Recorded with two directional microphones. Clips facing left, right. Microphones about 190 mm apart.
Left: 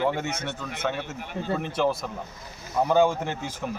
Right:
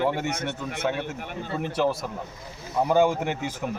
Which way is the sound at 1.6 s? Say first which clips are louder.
Right 3 dB; 5° right (ahead or behind).